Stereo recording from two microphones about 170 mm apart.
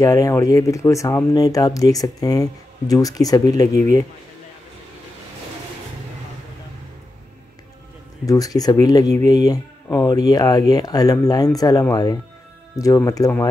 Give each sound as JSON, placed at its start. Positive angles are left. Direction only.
{"t": 0.0, "sound": "speech", "side_deg": 20}
{"t": 8.3, "sound": "speech", "side_deg": 20}